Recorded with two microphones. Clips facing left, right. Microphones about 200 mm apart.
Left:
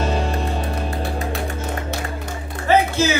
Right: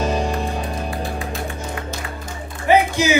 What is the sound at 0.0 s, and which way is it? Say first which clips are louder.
Music: right 1 dB; 15° right (ahead or behind).